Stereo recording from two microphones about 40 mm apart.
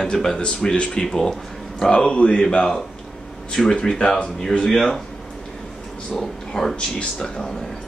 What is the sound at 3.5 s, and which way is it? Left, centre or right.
Speech, centre.